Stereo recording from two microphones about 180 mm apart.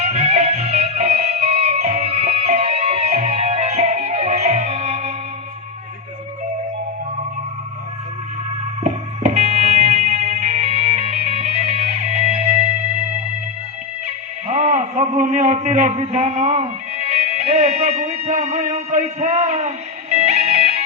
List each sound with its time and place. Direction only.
0.0 s music: 35° right (ahead or behind)
8.8 s music: 40° right (ahead or behind)
14.4 s a sound: 35° right (ahead or behind)
17.1 s music: 35° right (ahead or behind)